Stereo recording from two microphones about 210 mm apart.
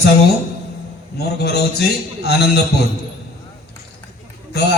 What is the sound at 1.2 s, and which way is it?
Speech, 50° left (ahead or behind).